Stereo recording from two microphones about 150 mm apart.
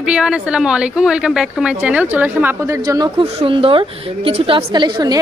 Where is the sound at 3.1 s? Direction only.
40° right (ahead or behind).